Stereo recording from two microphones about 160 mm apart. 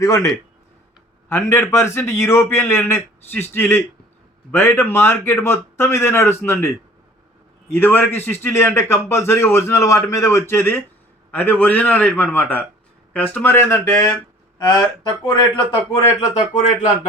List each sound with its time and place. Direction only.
0.0 s speech: 20° left (ahead or behind)
1.7 s a man's voice: 15° left (ahead or behind); by 16.0 s 30° left (ahead or behind)
16.6 s speech: 45° left (ahead or behind)